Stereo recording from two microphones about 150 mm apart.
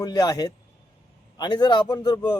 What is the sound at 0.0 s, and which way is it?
A man's voice, 25° left (ahead or behind).